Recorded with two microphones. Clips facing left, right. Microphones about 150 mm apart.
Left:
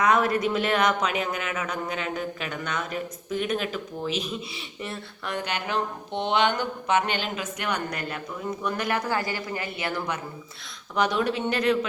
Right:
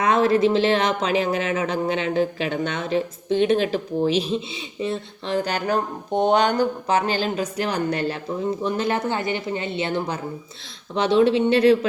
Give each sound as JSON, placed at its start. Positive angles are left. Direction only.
{"t": 0.0, "sound": "speech", "side_deg": -30}